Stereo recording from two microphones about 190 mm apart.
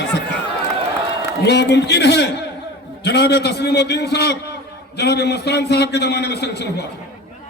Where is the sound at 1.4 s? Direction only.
60° left (ahead or behind).